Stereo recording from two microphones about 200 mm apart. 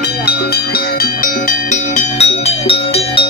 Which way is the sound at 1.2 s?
35° left (ahead or behind).